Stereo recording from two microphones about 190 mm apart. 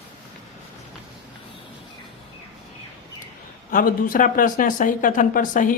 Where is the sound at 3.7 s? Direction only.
45° left (ahead or behind).